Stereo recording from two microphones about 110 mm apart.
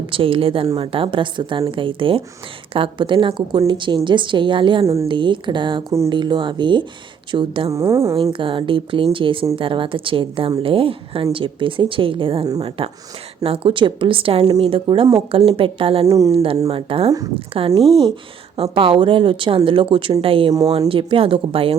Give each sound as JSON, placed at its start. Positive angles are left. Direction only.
{"t": 0.1, "sound": "a woman's voice", "side_deg": -55}
{"t": 7.7, "sound": "a woman's voice", "side_deg": -25}
{"t": 8.1, "sound": "a woman's voice", "side_deg": -55}
{"t": 17.1, "sound": "speech", "side_deg": -30}
{"t": 18.5, "sound": "a woman's voice", "side_deg": -55}